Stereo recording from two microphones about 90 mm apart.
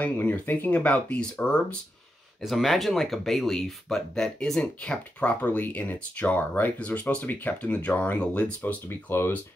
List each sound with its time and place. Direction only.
0.0 s speech: 20° left (ahead or behind)
2.4 s speech: centre (ahead or behind); by 9.4 s 25° left (ahead or behind)